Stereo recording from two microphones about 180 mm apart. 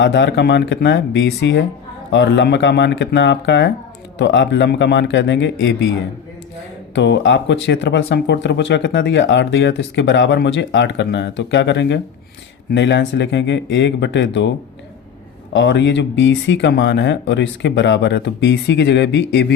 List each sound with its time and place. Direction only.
0.0 s speech: 85° left
6.9 s speech: 85° left
15.5 s speech: 90° left; by 19.5 s 70° left (ahead or behind)